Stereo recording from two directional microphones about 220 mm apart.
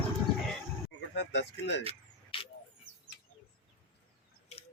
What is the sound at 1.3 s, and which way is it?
Speech, 55° left (ahead or behind).